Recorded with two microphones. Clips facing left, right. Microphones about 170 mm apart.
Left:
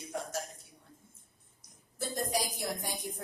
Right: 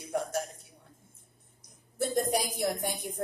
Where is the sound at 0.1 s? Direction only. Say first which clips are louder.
Right 7 dB; 60° right (ahead or behind).